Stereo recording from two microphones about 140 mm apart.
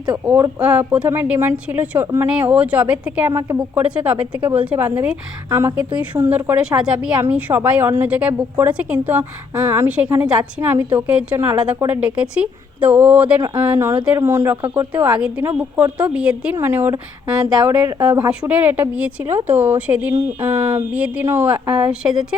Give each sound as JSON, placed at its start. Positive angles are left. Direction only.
{"t": 0.3, "sound": "a woman's voice", "side_deg": -15}
{"t": 18.2, "sound": "a woman's voice", "side_deg": -10}